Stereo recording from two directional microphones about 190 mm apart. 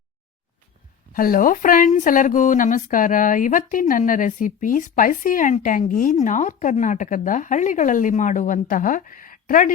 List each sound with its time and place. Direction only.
1.1 s speech: 50° left (ahead or behind)